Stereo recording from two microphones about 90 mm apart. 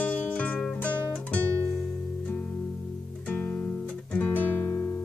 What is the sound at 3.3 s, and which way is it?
Guitar, 20° left (ahead or behind).